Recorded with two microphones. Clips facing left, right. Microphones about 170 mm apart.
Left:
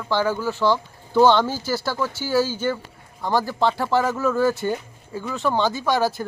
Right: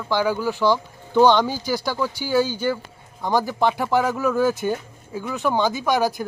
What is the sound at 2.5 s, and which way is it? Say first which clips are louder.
Speech: right 1 dB; 10° right (ahead or behind).